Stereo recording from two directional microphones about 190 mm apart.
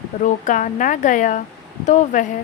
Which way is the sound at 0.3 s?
40° left (ahead or behind).